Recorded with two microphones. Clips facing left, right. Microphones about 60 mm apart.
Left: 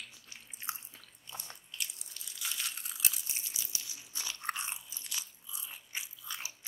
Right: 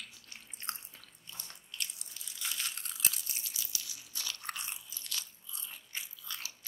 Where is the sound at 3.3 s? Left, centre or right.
Left.